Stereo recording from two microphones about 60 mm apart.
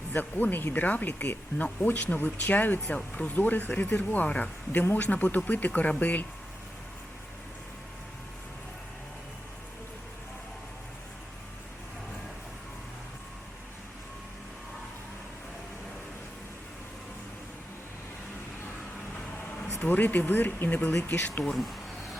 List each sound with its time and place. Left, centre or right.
0.1 s speech: left
19.6 s speech: left
21.4 s speech: centre